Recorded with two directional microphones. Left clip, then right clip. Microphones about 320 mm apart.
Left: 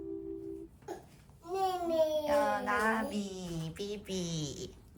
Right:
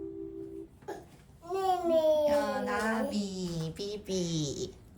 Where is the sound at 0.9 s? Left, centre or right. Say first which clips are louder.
Right 2 dB; centre.